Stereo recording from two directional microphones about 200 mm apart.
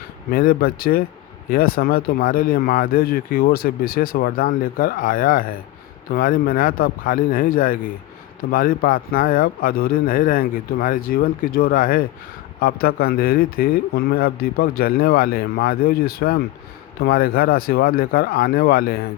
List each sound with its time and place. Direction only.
0.3 s speech: 50° left (ahead or behind)